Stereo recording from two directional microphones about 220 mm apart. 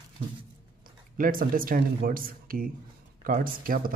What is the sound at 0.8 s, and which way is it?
A man's voice, 40° right (ahead or behind).